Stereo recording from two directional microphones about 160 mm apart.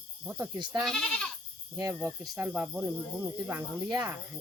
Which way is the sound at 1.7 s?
20° right (ahead or behind).